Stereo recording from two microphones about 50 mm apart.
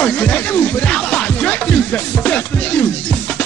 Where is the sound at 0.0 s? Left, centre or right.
Left.